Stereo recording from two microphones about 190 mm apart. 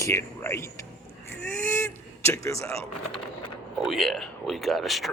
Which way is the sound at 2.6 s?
15° left (ahead or behind).